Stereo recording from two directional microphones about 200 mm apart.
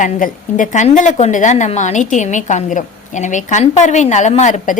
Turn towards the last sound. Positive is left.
turn(degrees=40)  # may be behind; listen again after turning